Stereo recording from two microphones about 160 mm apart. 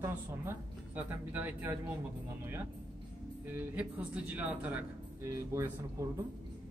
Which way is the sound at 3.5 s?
10° right (ahead or behind).